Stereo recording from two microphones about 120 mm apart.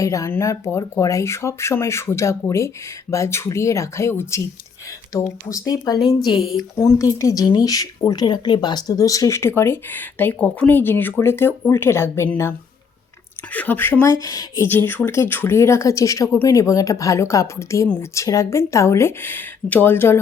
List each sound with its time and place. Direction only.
0.0 s speech: 25° left (ahead or behind)
6.3 s speech: centre (ahead or behind)
6.7 s speech: 25° left (ahead or behind)
14.7 s speech: 15° left (ahead or behind)